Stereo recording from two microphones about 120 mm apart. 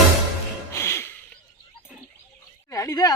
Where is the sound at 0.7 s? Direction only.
20° left (ahead or behind).